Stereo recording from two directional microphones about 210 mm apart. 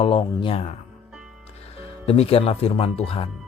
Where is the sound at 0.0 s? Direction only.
25° left (ahead or behind).